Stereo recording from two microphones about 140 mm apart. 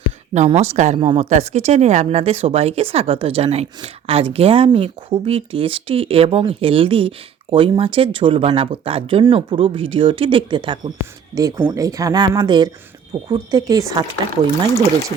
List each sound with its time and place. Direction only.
0.3 s speech: 50° right (ahead or behind)
0.9 s a woman's voice: 40° right (ahead or behind)
11.3 s speech: 25° right (ahead or behind)